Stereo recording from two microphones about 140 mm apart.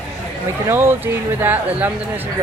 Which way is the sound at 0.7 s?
15° right (ahead or behind).